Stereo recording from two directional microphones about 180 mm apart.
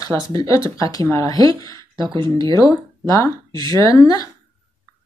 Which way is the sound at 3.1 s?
20° left (ahead or behind).